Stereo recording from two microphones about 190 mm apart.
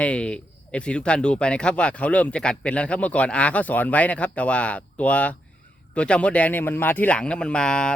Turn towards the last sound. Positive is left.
turn(degrees=5)  # may be behind; listen again after turning